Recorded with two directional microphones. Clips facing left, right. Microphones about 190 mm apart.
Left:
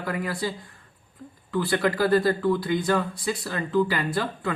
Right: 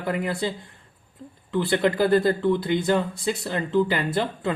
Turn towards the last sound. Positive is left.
turn(degrees=-25)  # may be behind; listen again after turning